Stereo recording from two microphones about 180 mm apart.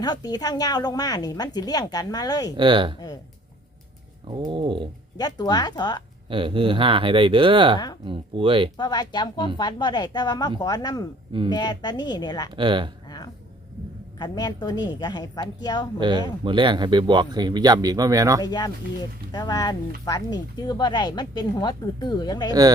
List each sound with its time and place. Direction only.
0.0 s speech: 20° left (ahead or behind)
2.6 s speech: 25° right (ahead or behind)
4.3 s speech: 25° right (ahead or behind)
5.1 s speech: 20° left (ahead or behind)
6.2 s speech: 30° right (ahead or behind)
8.8 s speech: 25° left (ahead or behind)
12.5 s speech: 25° right (ahead or behind)
13.1 s a sound: 20° left (ahead or behind)
14.2 s speech: 25° left (ahead or behind)
16.0 s speech: 25° right (ahead or behind)
18.4 s speech: 20° left (ahead or behind)